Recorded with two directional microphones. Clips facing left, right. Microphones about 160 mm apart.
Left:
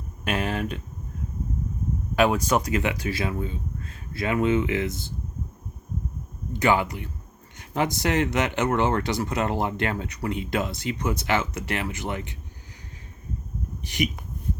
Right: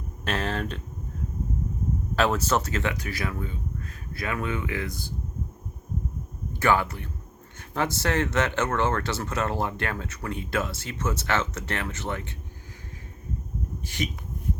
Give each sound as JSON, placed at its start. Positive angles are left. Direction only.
{"t": 0.3, "sound": "speech", "side_deg": 10}
{"t": 2.1, "sound": "speech", "side_deg": 15}
{"t": 6.6, "sound": "speech", "side_deg": 15}
{"t": 13.8, "sound": "speech", "side_deg": 15}